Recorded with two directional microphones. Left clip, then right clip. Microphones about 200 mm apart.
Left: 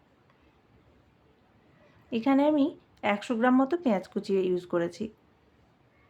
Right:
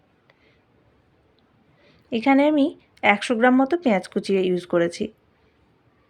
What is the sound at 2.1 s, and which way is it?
Speech, 20° right (ahead or behind).